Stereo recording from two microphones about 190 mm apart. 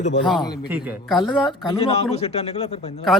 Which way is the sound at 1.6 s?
30° left (ahead or behind).